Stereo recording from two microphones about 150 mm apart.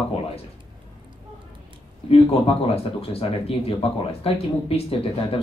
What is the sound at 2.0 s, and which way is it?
Speech, 40° left (ahead or behind).